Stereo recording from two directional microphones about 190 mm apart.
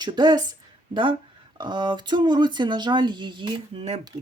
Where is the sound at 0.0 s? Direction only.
25° right (ahead or behind).